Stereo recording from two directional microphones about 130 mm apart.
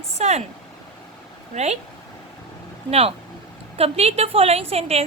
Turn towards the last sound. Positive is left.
turn(degrees=-50)  # may be behind; listen again after turning